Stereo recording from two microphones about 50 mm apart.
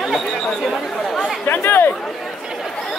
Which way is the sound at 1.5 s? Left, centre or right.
Left.